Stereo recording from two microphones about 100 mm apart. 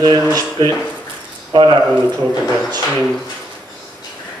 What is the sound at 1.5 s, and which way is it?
Speech, 50° right (ahead or behind).